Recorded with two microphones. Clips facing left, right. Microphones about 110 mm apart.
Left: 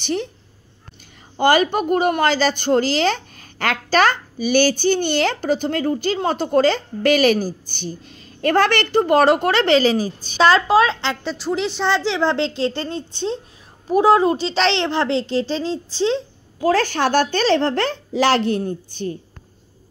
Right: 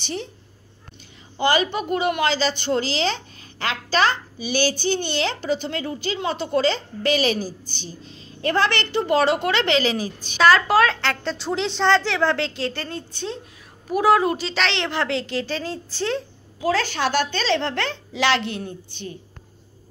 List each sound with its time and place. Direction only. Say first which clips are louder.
0.0 s a woman's voice: left 7 dB; 55° left (ahead or behind)
1.4 s a woman's voice: left 5 dB; 45° left (ahead or behind); by 11.3 s 20° left (ahead or behind)
11.3 s a child's voice: left 2 dB; 5° left (ahead or behind); by 16.2 s 20° left (ahead or behind)
16.5 s a woman's voice: left 5 dB; 45° left (ahead or behind)